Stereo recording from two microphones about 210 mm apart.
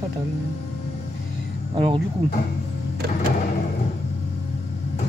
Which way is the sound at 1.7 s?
25° right (ahead or behind).